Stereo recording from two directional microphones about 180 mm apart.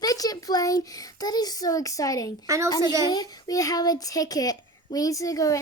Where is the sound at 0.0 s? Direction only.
20° left (ahead or behind).